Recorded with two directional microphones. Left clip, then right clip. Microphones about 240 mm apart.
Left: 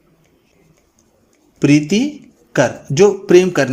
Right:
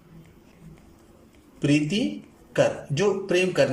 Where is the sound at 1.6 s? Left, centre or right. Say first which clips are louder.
Left 10 dB; left.